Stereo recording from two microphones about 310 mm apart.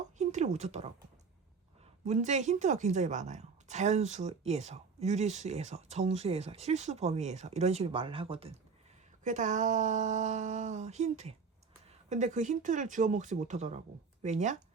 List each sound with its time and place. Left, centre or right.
0.2 s speech: right
2.0 s a woman's voice: right